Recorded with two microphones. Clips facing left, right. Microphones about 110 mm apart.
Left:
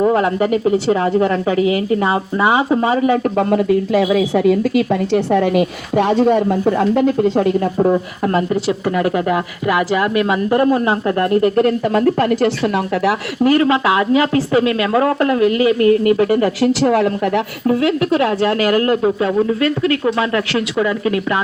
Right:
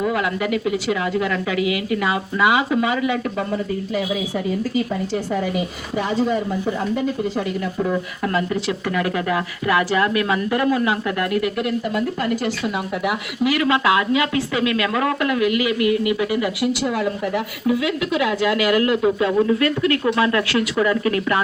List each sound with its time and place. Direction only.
0.0 s a woman's voice: 35° left (ahead or behind)
3.5 s a woman's voice: 70° left (ahead or behind); by 10.1 s 20° left (ahead or behind)
10.2 s a woman's voice: 30° left (ahead or behind); by 13.1 s 60° left (ahead or behind)
13.4 s a woman's voice: 35° left (ahead or behind)
16.6 s a woman's voice: 65° left (ahead or behind)
17.7 s a woman's voice: 50° left (ahead or behind); by 21.3 s 20° left (ahead or behind)